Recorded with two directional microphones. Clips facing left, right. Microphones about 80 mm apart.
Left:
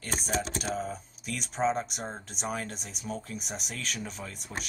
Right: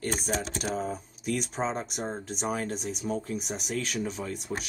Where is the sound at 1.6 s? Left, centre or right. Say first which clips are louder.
Left 2 dB; right.